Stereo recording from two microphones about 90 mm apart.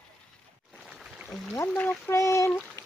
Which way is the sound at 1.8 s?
20° left (ahead or behind).